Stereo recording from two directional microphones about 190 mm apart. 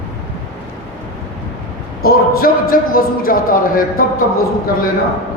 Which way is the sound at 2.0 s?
50° left (ahead or behind).